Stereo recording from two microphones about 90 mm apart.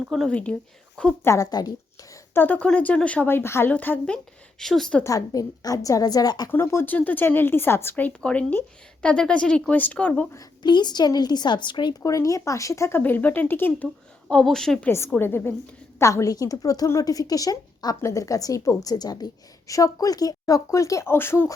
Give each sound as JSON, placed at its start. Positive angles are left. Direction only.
{"t": 0.3, "sound": "speech", "side_deg": 15}
{"t": 1.2, "sound": "a woman's voice", "side_deg": 30}
{"t": 1.5, "sound": "a woman's voice", "side_deg": 45}
{"t": 2.3, "sound": "speech", "side_deg": 20}
{"t": 4.6, "sound": "speech", "side_deg": 5}
{"t": 5.0, "sound": "a woman's voice", "side_deg": 40}
{"t": 6.5, "sound": "speech", "side_deg": 25}
{"t": 10.6, "sound": "a woman's voice", "side_deg": 55}
{"t": 12.0, "sound": "a woman's voice", "side_deg": 40}
{"t": 13.0, "sound": "speech", "side_deg": 20}
{"t": 14.3, "sound": "speech", "side_deg": 10}
{"t": 14.8, "sound": "a woman's voice", "side_deg": 30}